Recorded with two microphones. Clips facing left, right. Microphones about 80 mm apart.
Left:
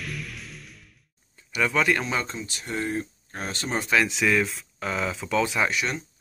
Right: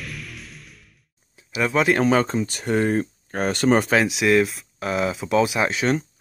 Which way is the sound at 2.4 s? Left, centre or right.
Right.